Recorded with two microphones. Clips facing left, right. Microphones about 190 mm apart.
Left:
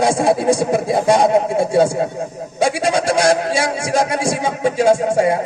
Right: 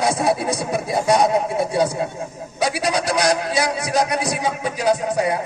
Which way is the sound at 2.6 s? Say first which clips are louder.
Left 4 dB; 25° left (ahead or behind).